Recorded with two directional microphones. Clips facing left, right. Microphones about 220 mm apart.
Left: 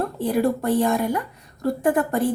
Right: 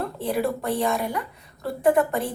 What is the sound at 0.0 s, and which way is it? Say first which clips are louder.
A woman's voice: left 4 dB; 45° left (ahead or behind).